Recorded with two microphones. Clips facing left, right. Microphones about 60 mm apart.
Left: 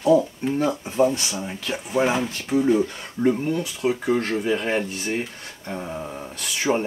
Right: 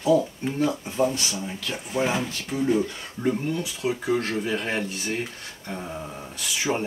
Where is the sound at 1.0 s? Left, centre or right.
Centre.